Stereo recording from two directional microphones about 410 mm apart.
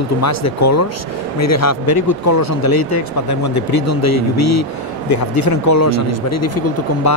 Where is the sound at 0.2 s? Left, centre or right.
Left.